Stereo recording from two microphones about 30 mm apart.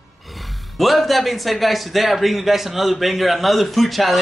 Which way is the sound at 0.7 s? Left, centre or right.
Centre.